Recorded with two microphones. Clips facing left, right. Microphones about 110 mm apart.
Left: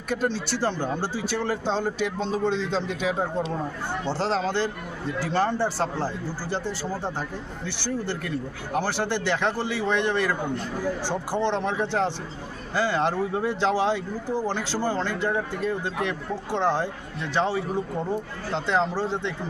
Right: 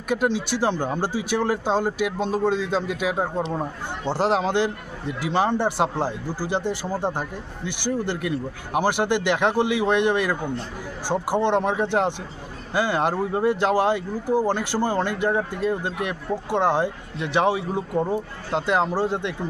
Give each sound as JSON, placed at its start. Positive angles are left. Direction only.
{"t": 0.1, "sound": "speech", "side_deg": -15}